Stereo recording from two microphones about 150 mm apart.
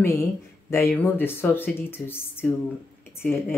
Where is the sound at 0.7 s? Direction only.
15° left (ahead or behind).